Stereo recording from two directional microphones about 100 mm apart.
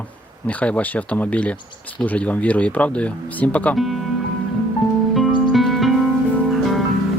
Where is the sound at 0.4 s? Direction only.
15° left (ahead or behind).